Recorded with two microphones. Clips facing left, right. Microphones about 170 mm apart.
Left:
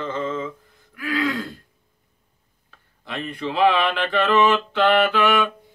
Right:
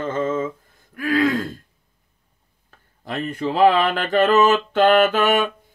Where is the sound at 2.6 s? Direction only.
45° right (ahead or behind).